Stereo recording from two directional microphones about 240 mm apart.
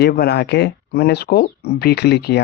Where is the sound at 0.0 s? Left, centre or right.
Left.